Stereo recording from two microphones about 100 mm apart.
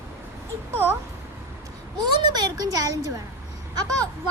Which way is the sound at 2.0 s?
45° right (ahead or behind).